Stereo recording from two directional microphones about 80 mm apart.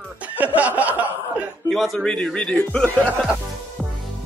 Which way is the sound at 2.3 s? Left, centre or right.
Centre.